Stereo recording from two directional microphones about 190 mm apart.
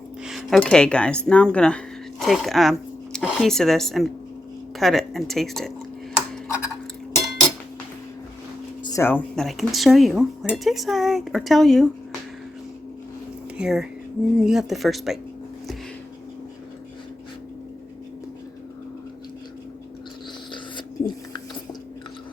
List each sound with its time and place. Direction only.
0.3 s speech: centre (ahead or behind)
6.1 s a sound: 5° right (ahead or behind)
8.8 s speech: 15° left (ahead or behind); by 11.9 s centre (ahead or behind)
13.6 s speech: 5° right (ahead or behind)
21.3 s chewing: 20° left (ahead or behind)